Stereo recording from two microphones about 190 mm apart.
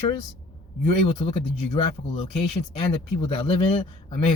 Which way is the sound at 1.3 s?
30° left (ahead or behind).